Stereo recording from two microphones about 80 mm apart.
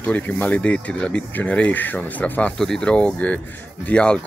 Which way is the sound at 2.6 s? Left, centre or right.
Centre.